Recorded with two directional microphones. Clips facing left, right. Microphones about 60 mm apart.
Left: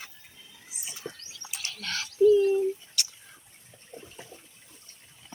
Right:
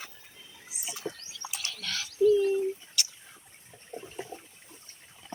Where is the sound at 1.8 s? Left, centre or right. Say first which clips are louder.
Left 3 dB; left.